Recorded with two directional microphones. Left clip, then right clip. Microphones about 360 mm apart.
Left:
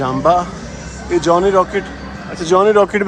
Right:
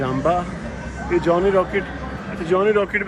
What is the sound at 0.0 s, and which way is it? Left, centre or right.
Speech, centre.